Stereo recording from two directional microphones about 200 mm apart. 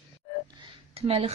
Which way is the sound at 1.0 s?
30° right (ahead or behind).